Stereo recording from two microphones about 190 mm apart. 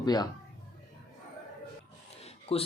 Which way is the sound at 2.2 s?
30° left (ahead or behind).